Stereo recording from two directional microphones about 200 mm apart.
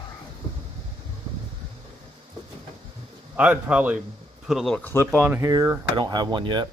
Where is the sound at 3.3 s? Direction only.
5° right (ahead or behind); by 5.0 s 10° left (ahead or behind).